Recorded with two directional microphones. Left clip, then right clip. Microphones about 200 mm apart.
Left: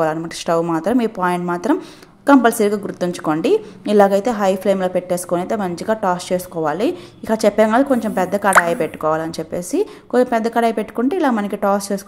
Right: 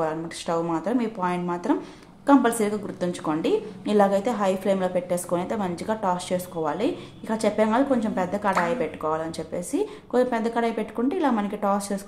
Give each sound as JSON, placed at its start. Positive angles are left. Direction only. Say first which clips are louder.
{"t": 0.0, "sound": "a woman's voice", "louder": "left 8 dB", "side_deg": 30}